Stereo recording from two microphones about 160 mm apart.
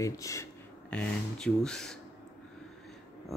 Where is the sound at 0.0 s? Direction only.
20° left (ahead or behind).